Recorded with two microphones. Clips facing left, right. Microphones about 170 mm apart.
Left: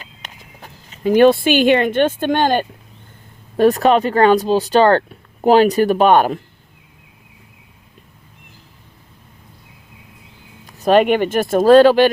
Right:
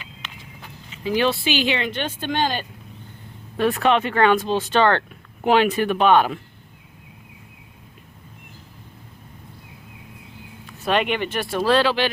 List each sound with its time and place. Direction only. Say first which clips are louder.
0.0 s speech: left 1 dB; 40° left (ahead or behind)
3.6 s speech: left 6 dB; 40° left (ahead or behind)
10.7 s speech: left 9 dB; 40° left (ahead or behind)